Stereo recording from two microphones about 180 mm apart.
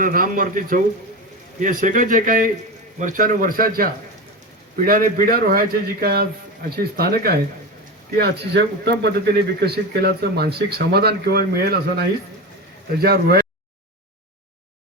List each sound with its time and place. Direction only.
0.0 s a man's voice: 50° right (ahead or behind)
4.9 s a man's voice: 50° right (ahead or behind)